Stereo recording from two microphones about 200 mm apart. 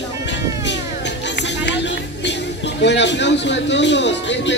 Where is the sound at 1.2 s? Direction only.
60° left (ahead or behind).